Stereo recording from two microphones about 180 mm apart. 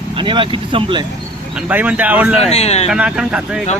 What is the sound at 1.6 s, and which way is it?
Speech, 10° right (ahead or behind).